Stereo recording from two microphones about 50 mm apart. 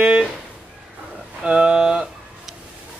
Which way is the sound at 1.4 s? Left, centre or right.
Centre.